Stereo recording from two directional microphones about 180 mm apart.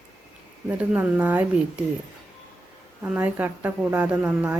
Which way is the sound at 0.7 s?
10° right (ahead or behind).